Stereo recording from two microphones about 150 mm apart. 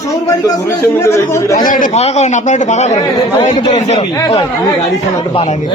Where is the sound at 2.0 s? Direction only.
50° left (ahead or behind).